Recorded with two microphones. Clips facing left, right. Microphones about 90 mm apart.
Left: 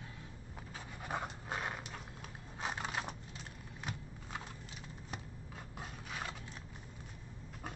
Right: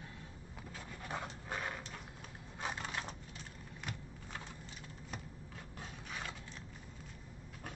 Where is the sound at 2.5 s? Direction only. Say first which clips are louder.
Left 2 dB; 15° left (ahead or behind).